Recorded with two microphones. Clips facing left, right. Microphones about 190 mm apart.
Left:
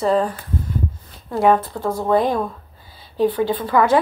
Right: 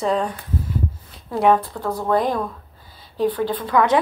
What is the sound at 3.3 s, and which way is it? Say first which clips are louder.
Speech: left 2 dB; 10° left (ahead or behind).